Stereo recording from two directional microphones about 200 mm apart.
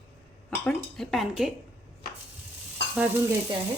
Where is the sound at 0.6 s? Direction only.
5° left (ahead or behind).